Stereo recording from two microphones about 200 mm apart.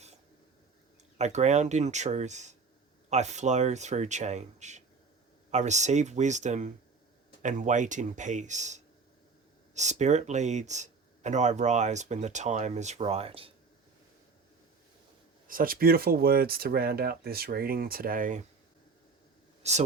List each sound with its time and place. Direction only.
1.2 s speech: 35° right (ahead or behind)
15.4 s speech: 45° right (ahead or behind)
19.6 s speech: 35° right (ahead or behind)